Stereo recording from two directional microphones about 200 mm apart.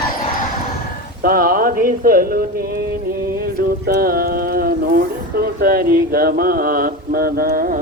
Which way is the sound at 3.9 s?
45° right (ahead or behind).